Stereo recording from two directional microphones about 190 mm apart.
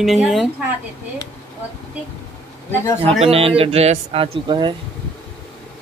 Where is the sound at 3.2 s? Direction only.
30° right (ahead or behind).